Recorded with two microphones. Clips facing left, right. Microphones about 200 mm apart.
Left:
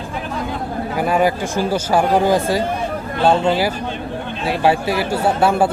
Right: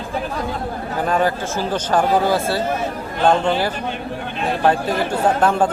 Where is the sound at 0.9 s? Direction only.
10° left (ahead or behind).